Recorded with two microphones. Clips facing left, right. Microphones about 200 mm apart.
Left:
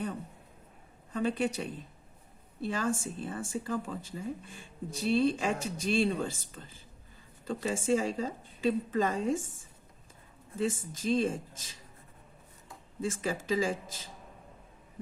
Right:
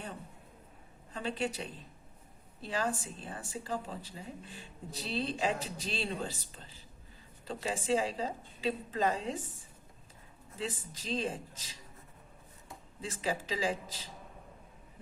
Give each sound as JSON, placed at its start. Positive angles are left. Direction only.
{"t": 1.1, "sound": "speech", "side_deg": 50}
{"t": 2.7, "sound": "speech", "side_deg": 50}
{"t": 10.6, "sound": "speech", "side_deg": 50}
{"t": 13.0, "sound": "speech", "side_deg": 50}